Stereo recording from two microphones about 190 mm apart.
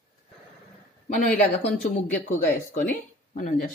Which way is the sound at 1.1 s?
45° left (ahead or behind).